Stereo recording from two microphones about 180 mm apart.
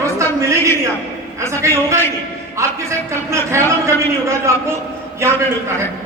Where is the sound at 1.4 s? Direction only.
15° right (ahead or behind).